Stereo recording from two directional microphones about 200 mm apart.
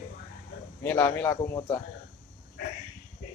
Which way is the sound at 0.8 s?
10° left (ahead or behind).